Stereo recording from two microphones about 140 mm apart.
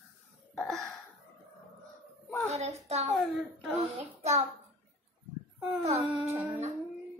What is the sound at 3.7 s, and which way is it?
Child singing, 50° right (ahead or behind).